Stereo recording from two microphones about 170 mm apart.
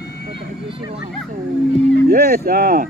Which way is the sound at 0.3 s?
30° right (ahead or behind).